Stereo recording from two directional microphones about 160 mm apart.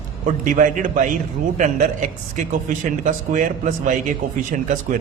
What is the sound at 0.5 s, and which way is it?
A man's voice, 55° right (ahead or behind).